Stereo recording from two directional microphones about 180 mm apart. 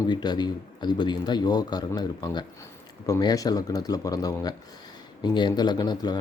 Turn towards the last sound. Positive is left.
turn(degrees=20)  # may be behind; listen again after turning